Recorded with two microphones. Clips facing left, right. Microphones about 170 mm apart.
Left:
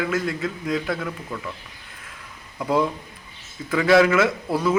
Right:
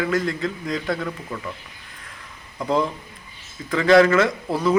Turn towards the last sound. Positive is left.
turn(degrees=5)  # may be behind; listen again after turning